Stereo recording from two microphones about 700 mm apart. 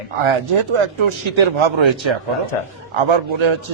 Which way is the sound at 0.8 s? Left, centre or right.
Right.